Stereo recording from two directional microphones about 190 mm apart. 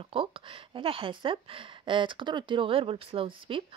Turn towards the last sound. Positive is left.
turn(degrees=-30)  # may be behind; listen again after turning